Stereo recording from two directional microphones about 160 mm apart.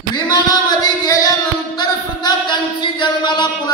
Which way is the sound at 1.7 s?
25° left (ahead or behind).